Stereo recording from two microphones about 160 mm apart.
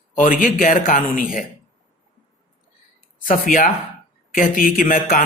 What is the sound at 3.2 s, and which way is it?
A man's voice, 60° left (ahead or behind).